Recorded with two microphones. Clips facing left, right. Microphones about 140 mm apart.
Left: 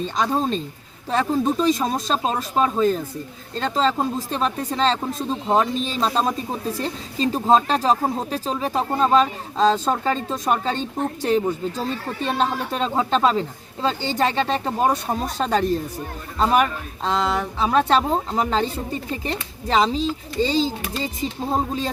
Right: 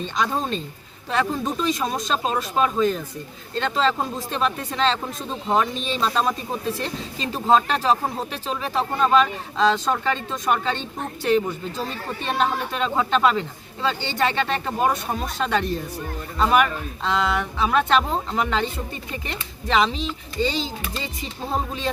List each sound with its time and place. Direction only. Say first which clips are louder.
1.1 s speech: left 3 dB; 35° left (ahead or behind)